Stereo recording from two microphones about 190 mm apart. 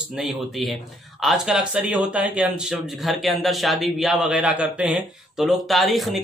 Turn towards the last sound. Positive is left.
turn(degrees=0)  # may be behind; listen again after turning